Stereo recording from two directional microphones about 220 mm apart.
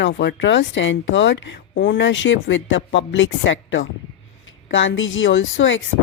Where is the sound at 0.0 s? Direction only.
50° left (ahead or behind).